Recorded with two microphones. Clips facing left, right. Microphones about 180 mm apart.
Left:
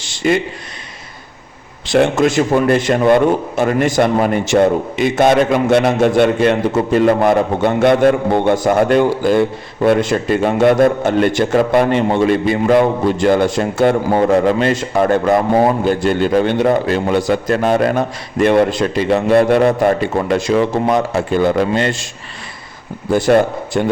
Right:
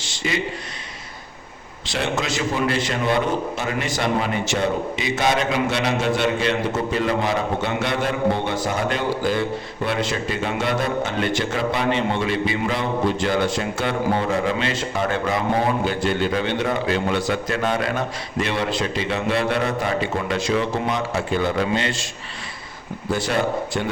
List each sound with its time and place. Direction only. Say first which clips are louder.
0.2 s a man's voice: left 10 dB; 55° left (ahead or behind)
1.9 s a man's voice: left 12 dB; 50° left (ahead or behind)
23.1 s a man's voice: left 10 dB; 50° left (ahead or behind)